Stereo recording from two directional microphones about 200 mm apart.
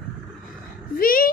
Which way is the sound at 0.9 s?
45° left (ahead or behind).